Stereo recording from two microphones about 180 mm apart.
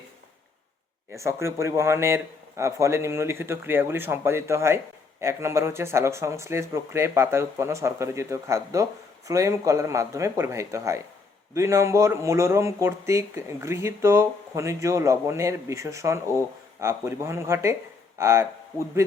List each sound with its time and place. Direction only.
1.1 s speech: 15° right (ahead or behind)